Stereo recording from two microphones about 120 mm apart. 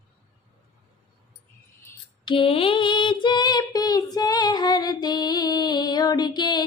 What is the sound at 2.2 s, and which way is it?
Female singing, 45° left (ahead or behind).